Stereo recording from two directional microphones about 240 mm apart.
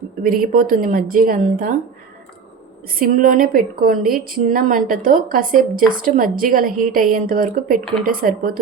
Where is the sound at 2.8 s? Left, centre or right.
Right.